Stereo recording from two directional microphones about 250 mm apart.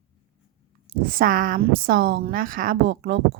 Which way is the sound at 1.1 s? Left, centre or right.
Right.